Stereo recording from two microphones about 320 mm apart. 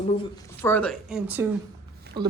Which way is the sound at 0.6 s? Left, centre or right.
Centre.